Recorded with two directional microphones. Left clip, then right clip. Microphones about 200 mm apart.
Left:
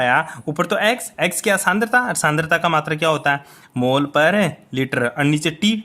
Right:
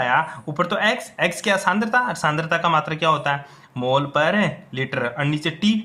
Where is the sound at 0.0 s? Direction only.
50° left (ahead or behind).